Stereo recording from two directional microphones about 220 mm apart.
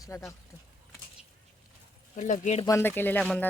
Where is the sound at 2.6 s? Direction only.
10° left (ahead or behind).